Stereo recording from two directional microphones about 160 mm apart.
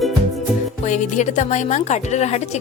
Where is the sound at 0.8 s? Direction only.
50° left (ahead or behind).